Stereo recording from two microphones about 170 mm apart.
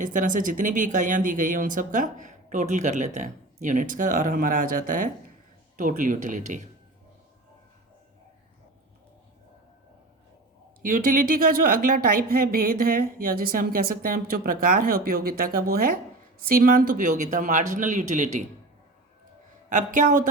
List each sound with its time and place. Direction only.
0.0 s speech: 50° right (ahead or behind)
10.8 s speech: 55° right (ahead or behind)
19.7 s speech: 50° right (ahead or behind)